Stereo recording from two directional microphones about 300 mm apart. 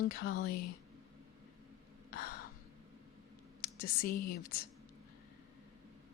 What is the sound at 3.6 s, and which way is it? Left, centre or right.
Speech, left.